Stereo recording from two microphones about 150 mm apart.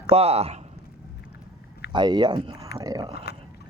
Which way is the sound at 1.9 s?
30° right (ahead or behind).